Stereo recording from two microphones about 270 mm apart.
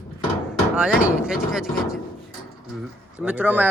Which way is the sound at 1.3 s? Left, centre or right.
Centre.